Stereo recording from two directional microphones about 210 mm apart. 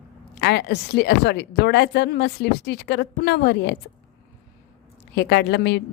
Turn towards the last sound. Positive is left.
turn(degrees=55)  # may be behind; listen again after turning